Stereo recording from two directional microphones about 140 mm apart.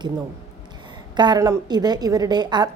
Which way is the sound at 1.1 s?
30° right (ahead or behind).